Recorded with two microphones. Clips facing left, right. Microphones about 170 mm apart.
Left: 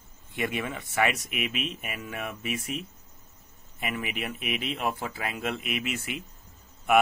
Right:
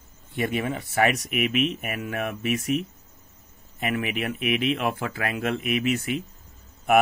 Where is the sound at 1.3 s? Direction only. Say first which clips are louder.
Right 8 dB; 55° right (ahead or behind).